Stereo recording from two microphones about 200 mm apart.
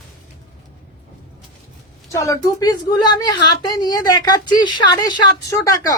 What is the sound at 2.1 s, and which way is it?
A woman's voice, 15° left (ahead or behind).